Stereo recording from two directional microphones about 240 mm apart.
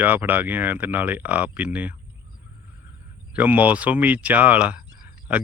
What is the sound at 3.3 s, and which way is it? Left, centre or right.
Speech, centre.